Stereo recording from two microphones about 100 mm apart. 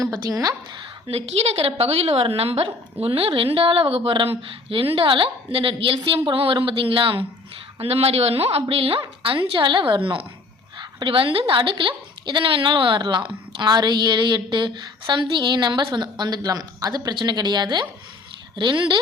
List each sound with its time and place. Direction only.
0.0 s a woman's voice: 40° right (ahead or behind)
0.8 s a woman's voice: 70° right (ahead or behind)
7.8 s a woman's voice: 80° right
8.7 s a woman's voice: 65° right (ahead or behind)